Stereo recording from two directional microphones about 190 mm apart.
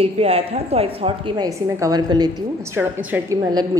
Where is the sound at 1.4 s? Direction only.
20° right (ahead or behind).